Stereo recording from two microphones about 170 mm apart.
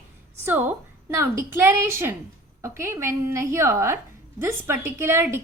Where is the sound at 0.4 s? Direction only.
15° right (ahead or behind).